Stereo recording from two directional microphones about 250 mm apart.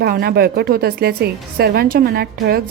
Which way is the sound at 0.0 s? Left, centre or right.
Right.